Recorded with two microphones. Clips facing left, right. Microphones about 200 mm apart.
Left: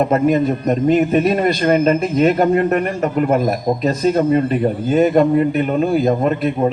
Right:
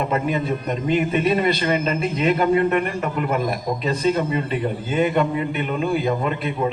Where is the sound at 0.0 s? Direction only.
45° left (ahead or behind).